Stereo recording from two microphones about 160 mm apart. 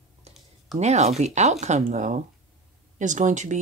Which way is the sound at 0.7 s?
45° right (ahead or behind).